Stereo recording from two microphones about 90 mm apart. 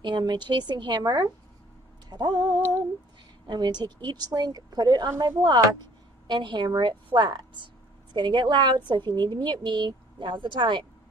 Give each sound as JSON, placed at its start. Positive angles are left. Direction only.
{"t": 0.0, "sound": "a woman's voice", "side_deg": -55}
{"t": 6.2, "sound": "a woman's voice", "side_deg": -55}